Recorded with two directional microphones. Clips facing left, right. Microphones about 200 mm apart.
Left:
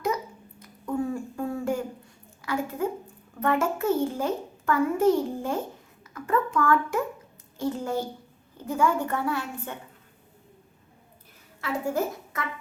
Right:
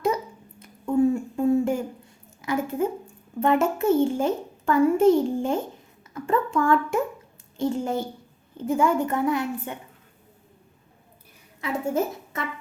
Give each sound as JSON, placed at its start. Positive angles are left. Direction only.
{"t": 0.6, "sound": "a sound", "side_deg": -25}
{"t": 3.4, "sound": "a child's voice", "side_deg": -25}
{"t": 11.6, "sound": "a woman's voice", "side_deg": -25}